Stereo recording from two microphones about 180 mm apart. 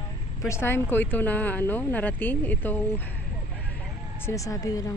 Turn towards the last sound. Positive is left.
turn(degrees=20)  # may be behind; listen again after turning